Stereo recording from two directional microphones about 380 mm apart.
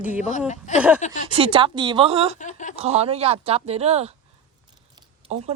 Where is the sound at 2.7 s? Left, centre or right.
Centre.